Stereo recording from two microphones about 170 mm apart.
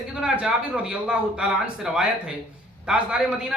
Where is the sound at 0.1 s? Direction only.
5° right (ahead or behind).